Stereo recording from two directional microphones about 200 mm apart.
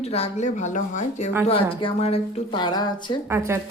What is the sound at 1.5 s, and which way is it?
Speech, 25° left (ahead or behind).